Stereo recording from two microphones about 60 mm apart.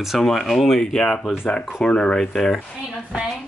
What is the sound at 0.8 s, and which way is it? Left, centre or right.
Speech, centre.